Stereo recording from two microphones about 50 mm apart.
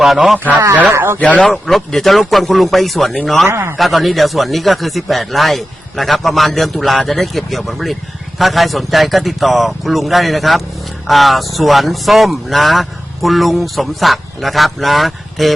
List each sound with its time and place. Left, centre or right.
0.3 s speech: right
0.9 s speech: right
1.2 s speech: left
1.5 s speech: centre
3.4 s speech: right
3.8 s speech: centre